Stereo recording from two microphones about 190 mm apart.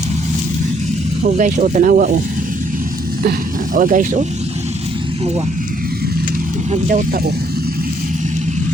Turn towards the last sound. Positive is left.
turn(degrees=-45)  # may be behind; listen again after turning